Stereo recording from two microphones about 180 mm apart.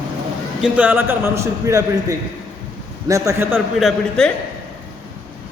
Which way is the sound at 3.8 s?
Centre (ahead or behind).